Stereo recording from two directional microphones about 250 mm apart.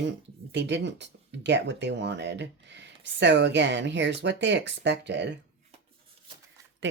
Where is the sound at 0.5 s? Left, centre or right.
Right.